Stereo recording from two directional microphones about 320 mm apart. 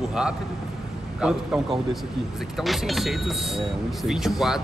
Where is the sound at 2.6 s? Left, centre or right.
Centre.